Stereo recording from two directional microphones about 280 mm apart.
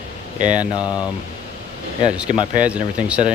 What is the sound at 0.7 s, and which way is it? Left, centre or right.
Speech, centre.